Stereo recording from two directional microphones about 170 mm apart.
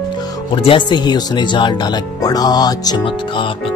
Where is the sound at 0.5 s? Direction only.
30° left (ahead or behind).